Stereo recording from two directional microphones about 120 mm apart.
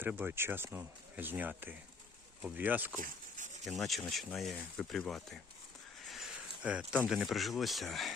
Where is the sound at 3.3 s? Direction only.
90° right.